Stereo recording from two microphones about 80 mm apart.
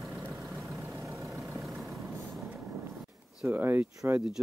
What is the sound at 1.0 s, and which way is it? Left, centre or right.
Vehicle, right.